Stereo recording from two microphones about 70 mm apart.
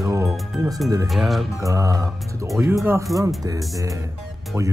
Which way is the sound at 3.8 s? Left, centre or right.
Right.